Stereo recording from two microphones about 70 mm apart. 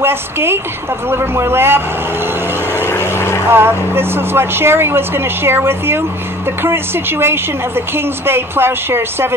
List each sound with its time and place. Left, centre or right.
0.0 s a woman's voice: right
2.7 s vehicle: left
3.5 s a woman's voice: right